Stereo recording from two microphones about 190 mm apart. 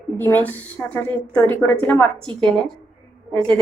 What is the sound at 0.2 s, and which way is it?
A woman's voice, 10° left (ahead or behind).